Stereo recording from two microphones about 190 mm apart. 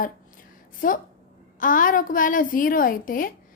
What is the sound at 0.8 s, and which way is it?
A woman's voice, 45° left (ahead or behind).